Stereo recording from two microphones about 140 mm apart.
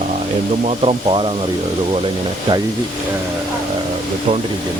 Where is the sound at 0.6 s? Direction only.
40° right (ahead or behind).